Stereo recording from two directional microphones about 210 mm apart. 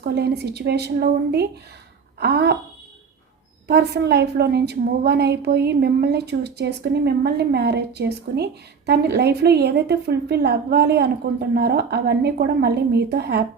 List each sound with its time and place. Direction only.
0.0 s a woman's voice: 50° right (ahead or behind)
3.7 s a woman's voice: 50° right (ahead or behind)